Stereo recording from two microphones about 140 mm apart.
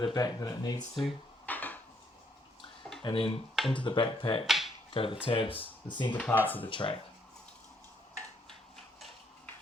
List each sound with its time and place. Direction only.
0.0 s speech: 30° left (ahead or behind)
1.5 s dishes: 10° left (ahead or behind)
3.0 s speech: 40° left (ahead or behind)
4.4 s finger snapping: centre (ahead or behind)
4.9 s speech: 40° left (ahead or behind)
6.1 s speech: 10° left (ahead or behind)
6.7 s speech: 35° left (ahead or behind)